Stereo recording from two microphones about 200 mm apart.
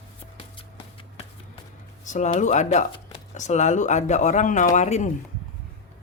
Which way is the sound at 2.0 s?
35° left (ahead or behind).